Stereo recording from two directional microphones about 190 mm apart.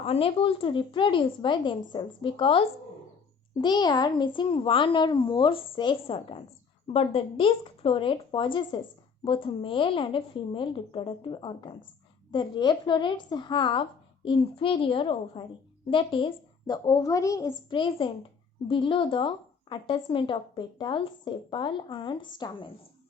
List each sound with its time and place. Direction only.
0.0 s speech: 30° left (ahead or behind)